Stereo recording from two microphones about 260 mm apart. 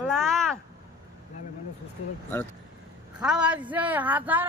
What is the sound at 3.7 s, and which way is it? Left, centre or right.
Speech, centre.